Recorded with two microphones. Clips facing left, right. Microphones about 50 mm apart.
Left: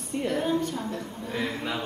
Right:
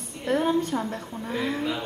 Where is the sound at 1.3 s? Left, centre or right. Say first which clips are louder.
Right 3 dB; centre.